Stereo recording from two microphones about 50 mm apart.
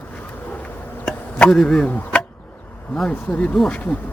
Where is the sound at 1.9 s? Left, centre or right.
Left.